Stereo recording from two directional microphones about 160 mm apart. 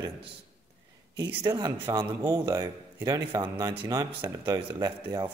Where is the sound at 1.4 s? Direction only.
25° right (ahead or behind).